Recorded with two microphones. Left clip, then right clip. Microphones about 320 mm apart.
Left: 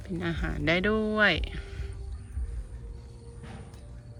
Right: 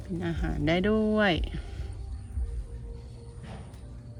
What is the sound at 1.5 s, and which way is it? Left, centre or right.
Music, left.